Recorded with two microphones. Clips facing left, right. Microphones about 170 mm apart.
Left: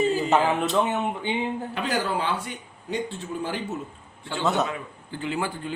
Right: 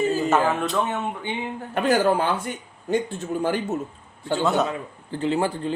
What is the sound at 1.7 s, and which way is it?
A man's voice, 50° right (ahead or behind).